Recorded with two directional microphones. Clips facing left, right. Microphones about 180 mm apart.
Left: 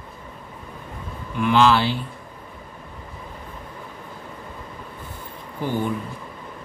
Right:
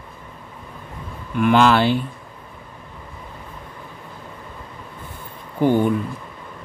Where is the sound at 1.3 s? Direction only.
55° right (ahead or behind).